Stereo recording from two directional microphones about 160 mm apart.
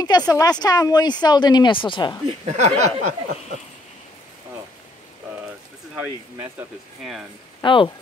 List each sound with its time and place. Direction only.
0.0 s speech: 25° left (ahead or behind)
2.4 s speech: 45° right (ahead or behind)
7.0 s speech: centre (ahead or behind)
7.6 s speech: 30° left (ahead or behind)